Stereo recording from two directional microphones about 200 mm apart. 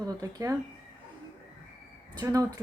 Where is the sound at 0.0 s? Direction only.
20° right (ahead or behind).